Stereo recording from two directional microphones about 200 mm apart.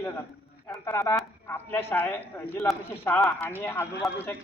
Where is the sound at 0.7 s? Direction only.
15° left (ahead or behind).